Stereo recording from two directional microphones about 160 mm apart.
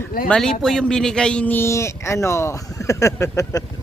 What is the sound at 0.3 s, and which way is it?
Speech, 5° left (ahead or behind).